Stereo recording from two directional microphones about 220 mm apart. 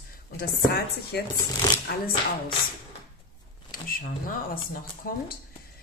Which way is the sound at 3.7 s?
40° left (ahead or behind).